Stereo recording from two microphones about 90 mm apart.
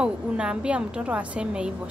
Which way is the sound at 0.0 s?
10° right (ahead or behind).